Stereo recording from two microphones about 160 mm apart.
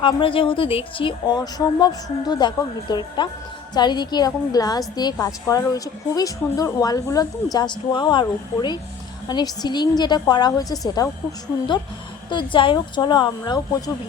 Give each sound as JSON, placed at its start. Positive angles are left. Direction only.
{"t": 0.0, "sound": "a woman's voice", "side_deg": 35}